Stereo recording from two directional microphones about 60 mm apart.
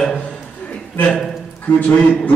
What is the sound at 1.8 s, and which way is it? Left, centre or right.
Speech, left.